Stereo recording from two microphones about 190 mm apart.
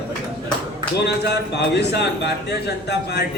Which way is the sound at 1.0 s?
60° left (ahead or behind).